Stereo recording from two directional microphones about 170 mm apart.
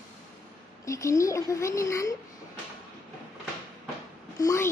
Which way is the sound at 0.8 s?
20° left (ahead or behind).